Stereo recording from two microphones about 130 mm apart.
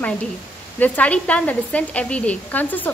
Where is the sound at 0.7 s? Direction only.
10° left (ahead or behind).